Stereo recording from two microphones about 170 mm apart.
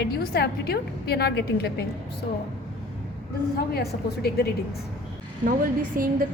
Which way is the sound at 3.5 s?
65° left (ahead or behind).